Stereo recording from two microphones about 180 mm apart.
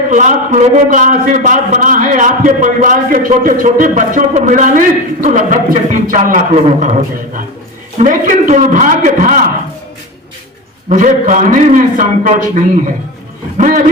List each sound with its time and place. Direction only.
0.1 s a man's voice: 45° right (ahead or behind)
10.8 s a man's voice: 45° right (ahead or behind)